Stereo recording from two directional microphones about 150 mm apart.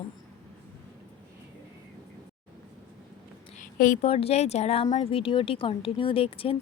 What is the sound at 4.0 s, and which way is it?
Speech, 40° left (ahead or behind).